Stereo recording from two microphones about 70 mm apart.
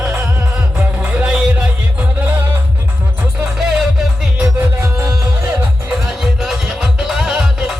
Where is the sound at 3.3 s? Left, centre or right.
Centre.